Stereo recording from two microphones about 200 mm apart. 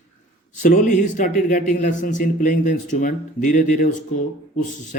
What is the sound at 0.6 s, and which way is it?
A man's voice, 40° left (ahead or behind).